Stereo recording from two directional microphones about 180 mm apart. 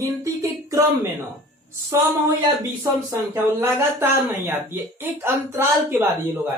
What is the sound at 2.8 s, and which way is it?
Speech, 15° right (ahead or behind).